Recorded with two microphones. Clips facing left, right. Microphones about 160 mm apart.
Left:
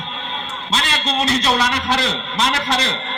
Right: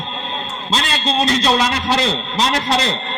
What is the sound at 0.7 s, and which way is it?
A man's voice, 35° right (ahead or behind).